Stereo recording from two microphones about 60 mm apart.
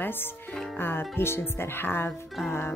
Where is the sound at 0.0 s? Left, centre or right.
Left.